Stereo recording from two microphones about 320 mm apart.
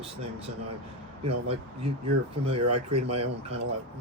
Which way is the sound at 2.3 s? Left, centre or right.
Centre.